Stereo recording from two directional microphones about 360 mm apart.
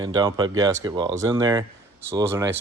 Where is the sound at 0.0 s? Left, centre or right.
Centre.